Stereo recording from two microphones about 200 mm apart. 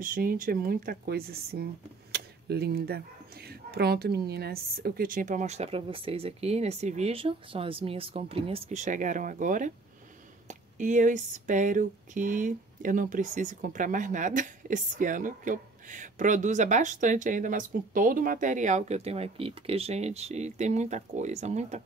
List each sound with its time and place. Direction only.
0.0 s speech: 45° right (ahead or behind)